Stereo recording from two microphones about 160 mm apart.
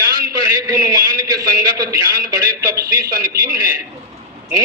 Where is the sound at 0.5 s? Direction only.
20° right (ahead or behind).